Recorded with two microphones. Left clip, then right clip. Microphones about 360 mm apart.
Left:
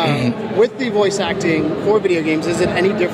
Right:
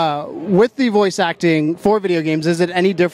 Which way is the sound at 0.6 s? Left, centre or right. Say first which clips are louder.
Right 1 dB; right.